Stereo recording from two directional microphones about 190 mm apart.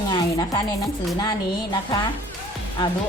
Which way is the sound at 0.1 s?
20° left (ahead or behind).